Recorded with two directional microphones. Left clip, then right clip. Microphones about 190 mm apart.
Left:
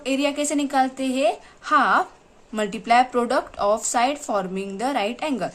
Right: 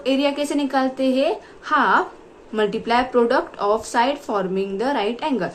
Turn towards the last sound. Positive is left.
turn(degrees=30)  # may be behind; listen again after turning